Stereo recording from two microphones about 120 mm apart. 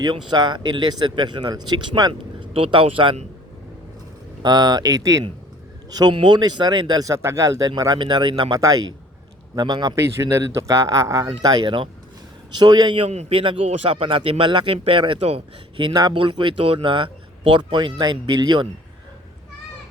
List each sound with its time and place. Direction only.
0.0 s speech: 35° right (ahead or behind)
4.4 s speech: 35° right (ahead or behind)
8.5 s speech: 30° right (ahead or behind)
9.9 s speech: 20° right (ahead or behind); by 13.1 s 40° right (ahead or behind)
13.1 s a man's voice: 65° right (ahead or behind)
13.4 s speech: 45° right (ahead or behind)
15.8 s speech: 40° right (ahead or behind)